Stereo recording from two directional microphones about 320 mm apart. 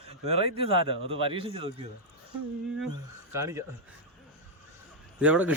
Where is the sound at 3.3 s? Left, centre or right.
Centre.